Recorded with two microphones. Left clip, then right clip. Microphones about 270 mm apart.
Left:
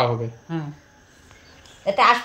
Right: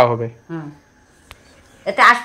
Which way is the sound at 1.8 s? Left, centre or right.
Left.